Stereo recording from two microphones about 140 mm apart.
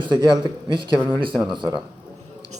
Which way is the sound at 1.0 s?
20° right (ahead or behind).